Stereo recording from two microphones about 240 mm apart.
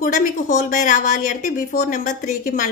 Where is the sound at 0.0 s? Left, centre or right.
Left.